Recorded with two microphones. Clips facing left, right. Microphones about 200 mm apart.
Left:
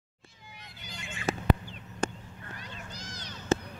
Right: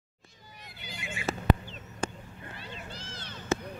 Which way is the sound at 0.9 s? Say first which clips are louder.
Left 1 dB; 5° right (ahead or behind).